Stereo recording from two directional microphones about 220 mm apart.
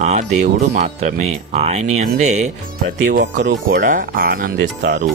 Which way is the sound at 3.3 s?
50° right (ahead or behind).